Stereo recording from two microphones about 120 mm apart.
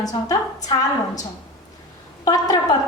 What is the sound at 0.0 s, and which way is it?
Speech, 30° left (ahead or behind).